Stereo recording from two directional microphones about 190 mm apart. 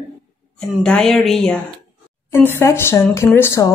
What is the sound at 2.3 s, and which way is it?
Speech, 10° left (ahead or behind).